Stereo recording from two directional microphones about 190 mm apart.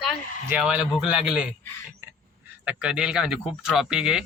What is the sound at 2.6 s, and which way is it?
Speech, 5° right (ahead or behind).